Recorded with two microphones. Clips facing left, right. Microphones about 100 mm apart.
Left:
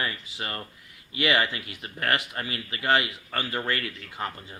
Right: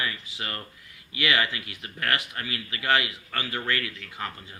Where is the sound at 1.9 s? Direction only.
25° left (ahead or behind).